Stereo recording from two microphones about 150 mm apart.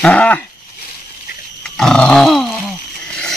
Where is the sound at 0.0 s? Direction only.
10° left (ahead or behind).